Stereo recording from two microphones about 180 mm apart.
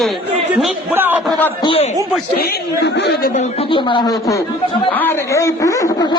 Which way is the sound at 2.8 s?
65° left (ahead or behind).